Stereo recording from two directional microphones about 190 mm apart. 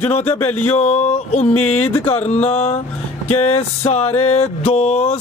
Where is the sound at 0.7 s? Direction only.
35° left (ahead or behind).